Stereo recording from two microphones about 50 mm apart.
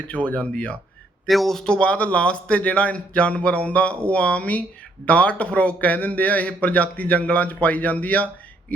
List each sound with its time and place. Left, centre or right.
0.1 s a man's voice: left
1.3 s speech: centre
1.6 s a man's voice: centre